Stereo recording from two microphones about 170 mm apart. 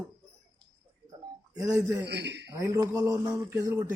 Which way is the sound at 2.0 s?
80° right.